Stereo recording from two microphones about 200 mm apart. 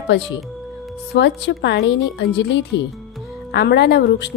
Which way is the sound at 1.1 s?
60° left (ahead or behind).